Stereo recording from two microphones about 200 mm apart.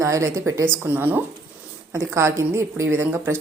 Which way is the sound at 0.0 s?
15° right (ahead or behind).